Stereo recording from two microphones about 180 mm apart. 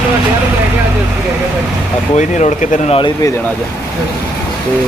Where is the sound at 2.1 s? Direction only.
40° left (ahead or behind).